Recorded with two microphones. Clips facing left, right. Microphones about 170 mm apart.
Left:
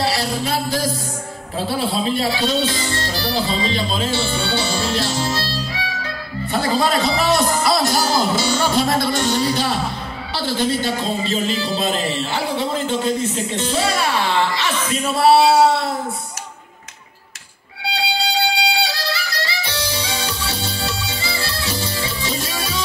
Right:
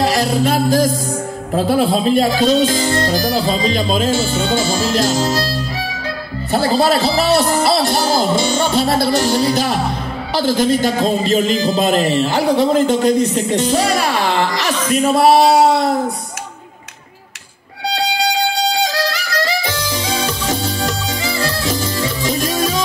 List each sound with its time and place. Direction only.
0.0 s music: 45° right (ahead or behind)
1.6 s speech: 45° right (ahead or behind)
6.5 s music: 35° right (ahead or behind)
11.1 s speech: 45° right (ahead or behind)
13.0 s speech: 90° right
13.5 s speech: 40° right (ahead or behind)
15.0 s a sound: 40° right (ahead or behind)
18.6 s music: 45° right (ahead or behind)
20.1 s music: 90° right
20.4 s music: 45° right (ahead or behind)